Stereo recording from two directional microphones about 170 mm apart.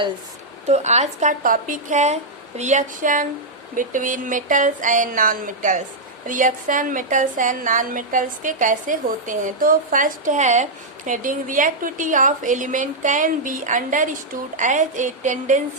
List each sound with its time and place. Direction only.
0.7 s a woman's voice: 45° right (ahead or behind)